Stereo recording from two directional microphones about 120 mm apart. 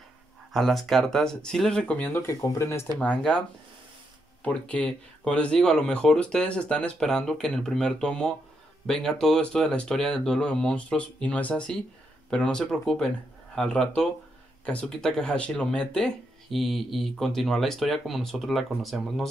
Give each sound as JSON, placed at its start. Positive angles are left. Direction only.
{"t": 0.5, "sound": "speech", "side_deg": 0}
{"t": 2.2, "sound": "speech", "side_deg": 25}
{"t": 3.0, "sound": "speech", "side_deg": 10}